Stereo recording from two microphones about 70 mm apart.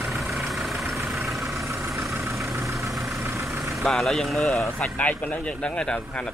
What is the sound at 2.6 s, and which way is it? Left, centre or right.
Vehicle, right.